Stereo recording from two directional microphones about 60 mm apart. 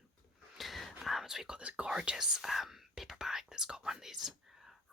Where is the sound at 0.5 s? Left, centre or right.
Centre.